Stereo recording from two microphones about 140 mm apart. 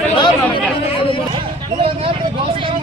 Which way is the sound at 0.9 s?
40° left (ahead or behind).